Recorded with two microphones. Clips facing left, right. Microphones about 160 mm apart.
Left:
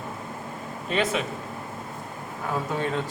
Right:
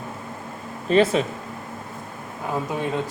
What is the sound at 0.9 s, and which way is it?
Speech, 35° right (ahead or behind).